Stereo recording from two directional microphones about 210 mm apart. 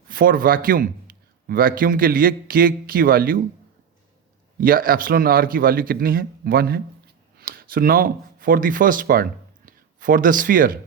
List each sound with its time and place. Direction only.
0.1 s a man's voice: 40° right (ahead or behind)
4.6 s a man's voice: 45° right (ahead or behind)